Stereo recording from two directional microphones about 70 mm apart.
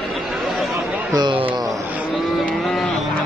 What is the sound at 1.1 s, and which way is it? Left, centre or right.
Speech, right.